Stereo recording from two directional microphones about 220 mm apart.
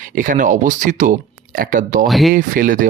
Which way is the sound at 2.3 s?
40° right (ahead or behind).